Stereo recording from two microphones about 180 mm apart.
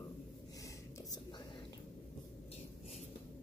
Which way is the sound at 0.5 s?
20° left (ahead or behind).